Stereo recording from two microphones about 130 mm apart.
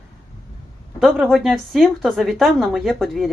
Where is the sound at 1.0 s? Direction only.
Centre (ahead or behind).